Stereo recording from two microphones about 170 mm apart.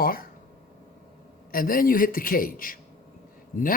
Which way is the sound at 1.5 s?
55° left (ahead or behind).